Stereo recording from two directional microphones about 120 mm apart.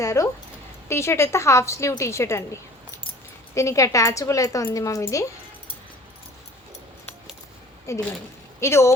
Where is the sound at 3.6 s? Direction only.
25° left (ahead or behind).